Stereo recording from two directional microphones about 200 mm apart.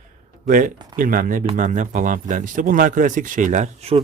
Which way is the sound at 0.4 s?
45° right (ahead or behind).